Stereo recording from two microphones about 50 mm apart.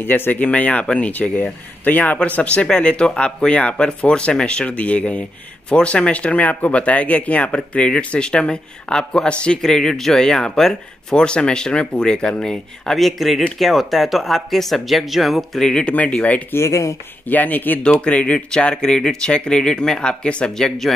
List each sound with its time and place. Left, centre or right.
0.0 s speech: left
7.5 s speech: left
9.6 s speech: centre
16.1 s speech: left
16.5 s speech: left
17.3 s speech: left
18.0 s speech: left
20.5 s speech: centre